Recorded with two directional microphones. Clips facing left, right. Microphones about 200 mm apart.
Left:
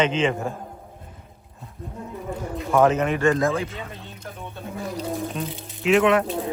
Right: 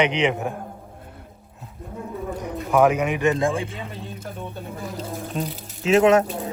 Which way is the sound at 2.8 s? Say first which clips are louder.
Left 1 dB; 15° right (ahead or behind).